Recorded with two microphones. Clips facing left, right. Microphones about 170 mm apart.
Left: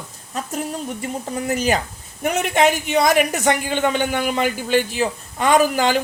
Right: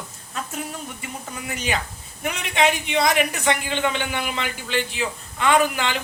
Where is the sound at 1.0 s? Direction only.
40° left (ahead or behind).